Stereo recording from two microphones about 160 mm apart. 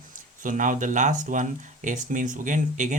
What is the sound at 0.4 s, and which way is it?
Speech, 55° right (ahead or behind).